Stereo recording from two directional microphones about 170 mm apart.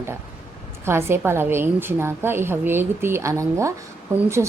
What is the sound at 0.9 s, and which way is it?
A woman's voice, 15° right (ahead or behind).